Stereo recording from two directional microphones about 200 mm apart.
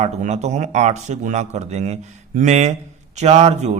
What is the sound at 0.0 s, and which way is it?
Speech, 35° right (ahead or behind).